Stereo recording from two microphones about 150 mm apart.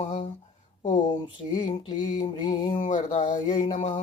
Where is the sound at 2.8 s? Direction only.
55° left (ahead or behind).